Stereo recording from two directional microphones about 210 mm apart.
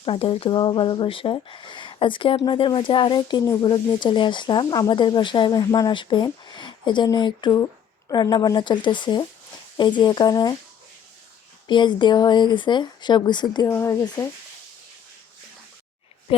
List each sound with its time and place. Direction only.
0.0 s speech: 25° left (ahead or behind)
11.7 s speech: 20° left (ahead or behind)